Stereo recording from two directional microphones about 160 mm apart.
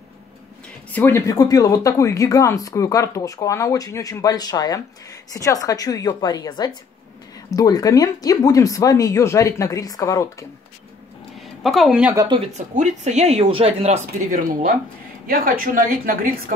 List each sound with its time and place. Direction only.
0.9 s speech: 15° left (ahead or behind)
11.6 s speech: centre (ahead or behind)
12.5 s speech: 50° right (ahead or behind)
15.2 s a woman's voice: 65° right (ahead or behind)